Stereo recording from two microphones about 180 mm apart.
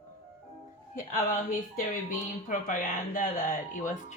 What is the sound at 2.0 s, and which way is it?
Speech, 50° left (ahead or behind).